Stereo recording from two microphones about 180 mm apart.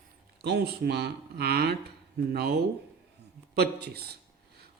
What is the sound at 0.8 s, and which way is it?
Speech, 65° right (ahead or behind).